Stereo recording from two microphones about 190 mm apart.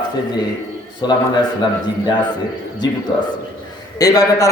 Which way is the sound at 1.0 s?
20° left (ahead or behind).